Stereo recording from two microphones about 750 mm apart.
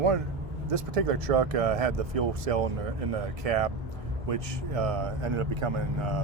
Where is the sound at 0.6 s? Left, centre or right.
Right.